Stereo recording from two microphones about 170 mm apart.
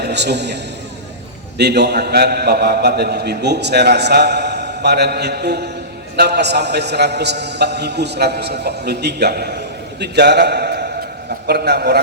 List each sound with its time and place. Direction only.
0.0 s a man's voice: 80° right